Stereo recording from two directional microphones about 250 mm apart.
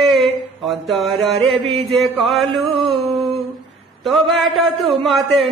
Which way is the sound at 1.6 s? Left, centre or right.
Right.